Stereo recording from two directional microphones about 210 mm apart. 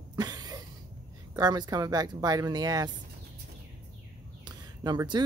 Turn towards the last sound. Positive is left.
turn(degrees=-20)  # may be behind; listen again after turning